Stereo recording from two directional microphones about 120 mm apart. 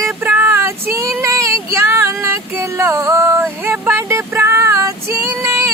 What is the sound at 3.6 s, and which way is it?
Female singing, 20° right (ahead or behind).